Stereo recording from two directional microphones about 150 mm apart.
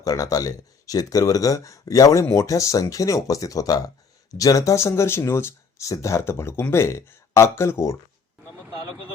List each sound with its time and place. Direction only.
0.0 s speech: 25° left (ahead or behind)